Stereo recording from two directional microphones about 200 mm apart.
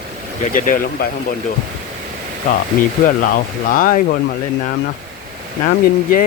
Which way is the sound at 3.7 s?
45° left (ahead or behind).